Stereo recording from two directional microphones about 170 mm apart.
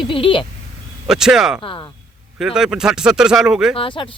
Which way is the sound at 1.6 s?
30° left (ahead or behind).